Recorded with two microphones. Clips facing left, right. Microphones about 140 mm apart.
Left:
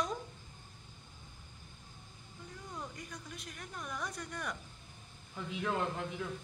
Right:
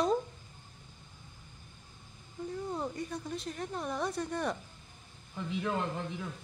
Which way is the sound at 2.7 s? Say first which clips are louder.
Right 6 dB; 30° right (ahead or behind).